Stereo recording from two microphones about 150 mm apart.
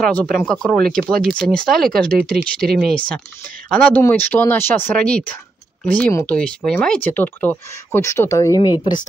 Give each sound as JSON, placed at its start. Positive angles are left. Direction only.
{"t": 0.0, "sound": "speech", "side_deg": 5}
{"t": 8.5, "sound": "a woman's voice", "side_deg": 30}